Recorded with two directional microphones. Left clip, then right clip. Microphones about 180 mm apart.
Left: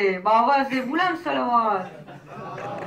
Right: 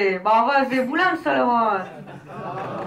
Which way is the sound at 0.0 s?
30° right (ahead or behind).